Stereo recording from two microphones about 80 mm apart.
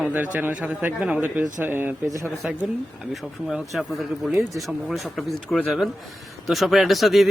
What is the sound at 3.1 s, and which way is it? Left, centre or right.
Speech, centre.